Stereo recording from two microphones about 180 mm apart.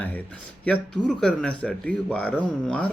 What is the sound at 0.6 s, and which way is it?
Speech, 5° left (ahead or behind).